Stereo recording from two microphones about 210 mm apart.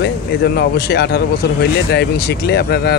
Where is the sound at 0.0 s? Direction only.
50° left (ahead or behind).